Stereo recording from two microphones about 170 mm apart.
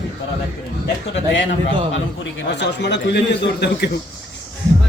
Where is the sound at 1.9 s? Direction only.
90° left.